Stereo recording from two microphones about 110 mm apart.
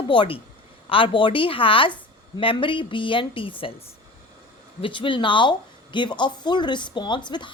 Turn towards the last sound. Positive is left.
turn(degrees=45)  # may be behind; listen again after turning